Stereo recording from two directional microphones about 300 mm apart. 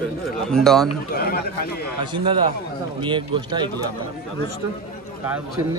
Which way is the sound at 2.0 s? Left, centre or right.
Centre.